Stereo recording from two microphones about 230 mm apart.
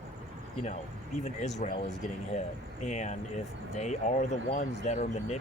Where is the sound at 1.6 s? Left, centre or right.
Left.